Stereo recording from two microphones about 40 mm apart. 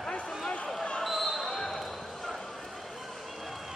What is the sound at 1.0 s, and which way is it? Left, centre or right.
Basketball bounce, centre.